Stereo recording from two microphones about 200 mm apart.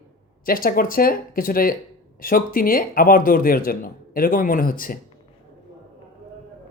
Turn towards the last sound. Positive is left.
turn(degrees=45)  # may be behind; listen again after turning